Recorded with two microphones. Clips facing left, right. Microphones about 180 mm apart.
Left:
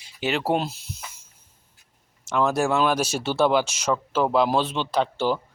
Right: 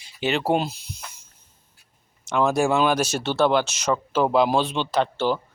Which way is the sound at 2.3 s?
Centre (ahead or behind).